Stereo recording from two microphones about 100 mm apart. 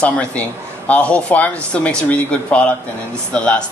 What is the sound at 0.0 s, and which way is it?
Speech, 10° left (ahead or behind).